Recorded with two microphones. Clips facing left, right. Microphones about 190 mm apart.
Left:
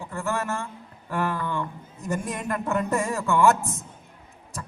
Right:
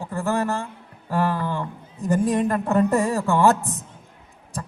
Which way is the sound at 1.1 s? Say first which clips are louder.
Right 4 dB; 35° right (ahead or behind).